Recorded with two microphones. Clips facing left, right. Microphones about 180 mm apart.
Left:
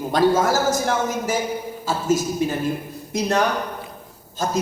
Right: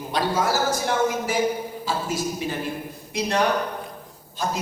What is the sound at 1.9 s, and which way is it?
A man's voice, 45° left (ahead or behind).